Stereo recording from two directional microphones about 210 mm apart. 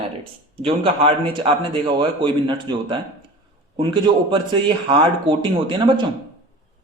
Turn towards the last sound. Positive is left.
turn(degrees=-20)  # may be behind; listen again after turning